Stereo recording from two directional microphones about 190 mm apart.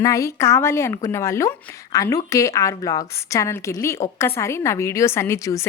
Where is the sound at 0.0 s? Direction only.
15° left (ahead or behind).